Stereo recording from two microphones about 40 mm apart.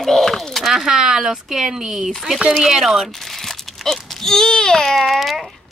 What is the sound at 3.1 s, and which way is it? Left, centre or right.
Baby cry, centre.